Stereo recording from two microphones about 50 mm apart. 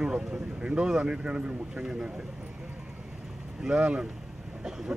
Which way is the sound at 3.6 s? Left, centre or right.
Centre.